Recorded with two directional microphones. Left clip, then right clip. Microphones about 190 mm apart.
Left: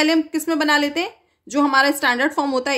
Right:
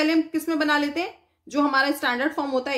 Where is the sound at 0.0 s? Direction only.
45° left (ahead or behind).